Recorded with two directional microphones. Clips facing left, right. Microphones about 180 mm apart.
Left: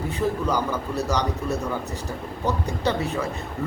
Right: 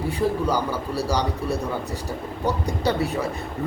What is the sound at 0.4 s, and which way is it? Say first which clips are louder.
Speech: right 1 dB; 10° right (ahead or behind).